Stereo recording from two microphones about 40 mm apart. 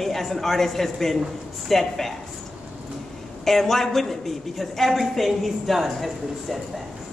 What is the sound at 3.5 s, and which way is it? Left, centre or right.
A woman's voice, centre.